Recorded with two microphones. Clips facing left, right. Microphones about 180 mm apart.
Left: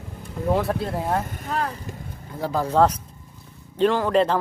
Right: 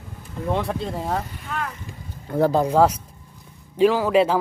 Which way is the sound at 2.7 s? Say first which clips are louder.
Right 1 dB; 10° right (ahead or behind).